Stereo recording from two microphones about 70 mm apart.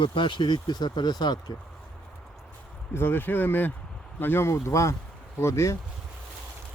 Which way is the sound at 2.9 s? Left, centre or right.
Left.